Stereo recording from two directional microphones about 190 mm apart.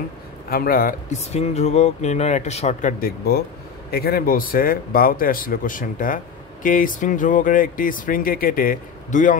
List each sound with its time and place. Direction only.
0.5 s speech: 50° left (ahead or behind)